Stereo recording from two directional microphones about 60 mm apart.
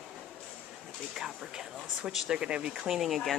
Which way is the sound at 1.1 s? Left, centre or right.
Centre.